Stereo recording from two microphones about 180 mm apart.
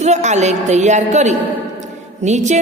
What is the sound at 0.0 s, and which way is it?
A woman's voice, 40° right (ahead or behind).